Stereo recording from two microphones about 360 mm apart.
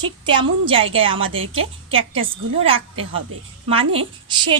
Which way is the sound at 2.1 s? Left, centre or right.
Centre.